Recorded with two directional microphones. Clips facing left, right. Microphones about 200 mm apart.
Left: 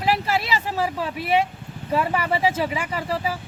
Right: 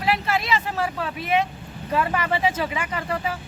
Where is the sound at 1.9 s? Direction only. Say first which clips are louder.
Left 1 dB; 10° left (ahead or behind).